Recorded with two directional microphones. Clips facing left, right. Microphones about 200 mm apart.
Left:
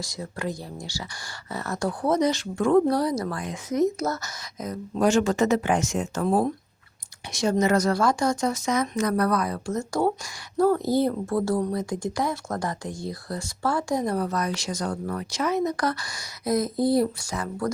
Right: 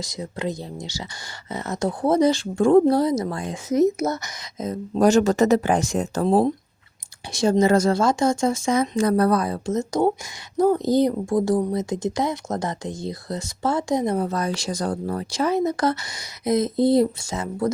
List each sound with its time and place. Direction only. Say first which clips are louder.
0.0 s speech: right 3 dB; 20° right (ahead or behind)
4.9 s speech: right 4 dB; 40° right (ahead or behind); by 17.7 s 25° right (ahead or behind)